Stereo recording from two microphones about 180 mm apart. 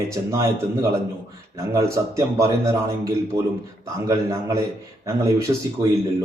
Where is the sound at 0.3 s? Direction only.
20° right (ahead or behind).